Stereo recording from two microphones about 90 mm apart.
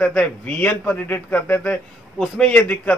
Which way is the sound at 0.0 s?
15° left (ahead or behind).